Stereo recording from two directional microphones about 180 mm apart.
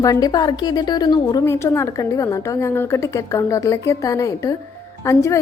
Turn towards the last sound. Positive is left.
turn(degrees=15)  # may be behind; listen again after turning